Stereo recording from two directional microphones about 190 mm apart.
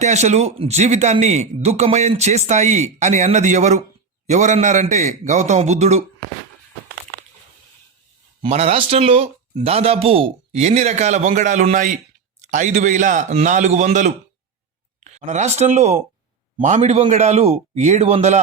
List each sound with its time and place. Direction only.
0.0 s a man's voice: 35° right (ahead or behind)
8.4 s a man's voice: 30° right (ahead or behind)